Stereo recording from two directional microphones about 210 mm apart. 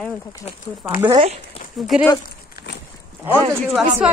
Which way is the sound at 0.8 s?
10° right (ahead or behind).